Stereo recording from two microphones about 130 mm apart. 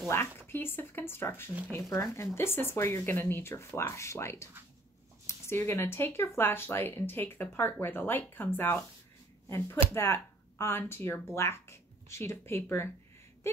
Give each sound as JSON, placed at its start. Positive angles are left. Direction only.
{"t": 0.1, "sound": "speech", "side_deg": 20}
{"t": 9.9, "sound": "speech", "side_deg": 20}